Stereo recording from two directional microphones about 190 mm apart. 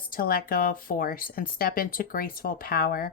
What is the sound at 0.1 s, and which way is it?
Speech, 50° left (ahead or behind).